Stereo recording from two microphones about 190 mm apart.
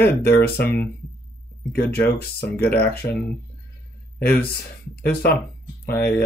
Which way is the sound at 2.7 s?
55° left (ahead or behind).